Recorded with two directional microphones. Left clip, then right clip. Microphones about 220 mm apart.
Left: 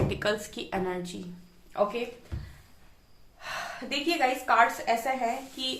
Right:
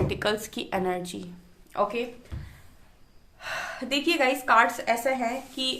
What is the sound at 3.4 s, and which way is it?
A woman's voice, 45° right (ahead or behind).